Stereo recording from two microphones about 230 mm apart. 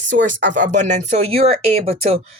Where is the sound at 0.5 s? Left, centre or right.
Right.